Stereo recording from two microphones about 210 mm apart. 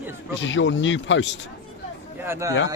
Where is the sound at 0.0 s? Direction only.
10° right (ahead or behind).